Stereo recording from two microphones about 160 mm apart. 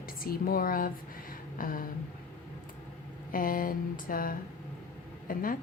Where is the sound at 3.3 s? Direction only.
60° left (ahead or behind).